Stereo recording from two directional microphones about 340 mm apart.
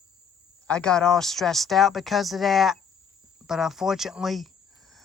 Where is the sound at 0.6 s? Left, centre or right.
Centre.